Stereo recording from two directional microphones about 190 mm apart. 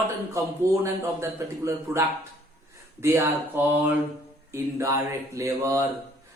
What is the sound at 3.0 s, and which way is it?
Speech, 15° right (ahead or behind).